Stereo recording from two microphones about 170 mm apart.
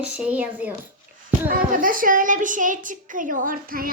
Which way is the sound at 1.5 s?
55° right (ahead or behind).